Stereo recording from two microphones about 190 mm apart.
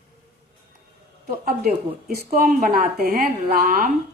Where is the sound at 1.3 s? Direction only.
55° right (ahead or behind).